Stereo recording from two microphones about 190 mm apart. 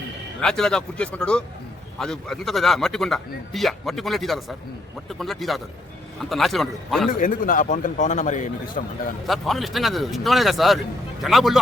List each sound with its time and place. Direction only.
0.3 s speech: 5° left (ahead or behind)
7.1 s a man's voice: 45° left (ahead or behind)
9.2 s speech: centre (ahead or behind)